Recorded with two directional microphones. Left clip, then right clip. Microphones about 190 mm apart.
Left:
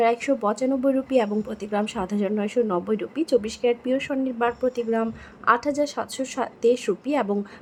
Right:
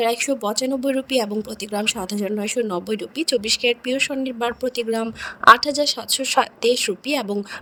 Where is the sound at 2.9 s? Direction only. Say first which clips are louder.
Even; 50° right (ahead or behind).